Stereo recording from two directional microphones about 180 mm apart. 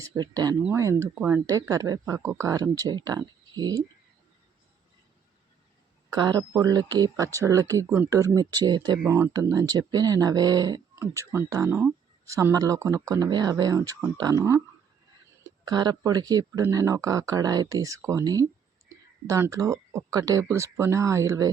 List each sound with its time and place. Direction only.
0.0 s speech: 20° right (ahead or behind)
6.1 s a woman's voice: 25° right (ahead or behind)